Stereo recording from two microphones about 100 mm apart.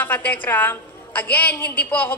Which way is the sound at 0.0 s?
20° left (ahead or behind).